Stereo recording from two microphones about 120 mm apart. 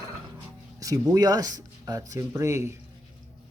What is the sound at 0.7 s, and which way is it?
Speech, 30° right (ahead or behind).